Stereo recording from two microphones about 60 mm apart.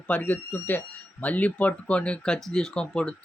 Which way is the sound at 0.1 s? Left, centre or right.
Left.